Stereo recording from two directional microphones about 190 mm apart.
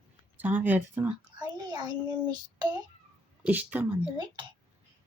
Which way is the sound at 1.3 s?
20° right (ahead or behind).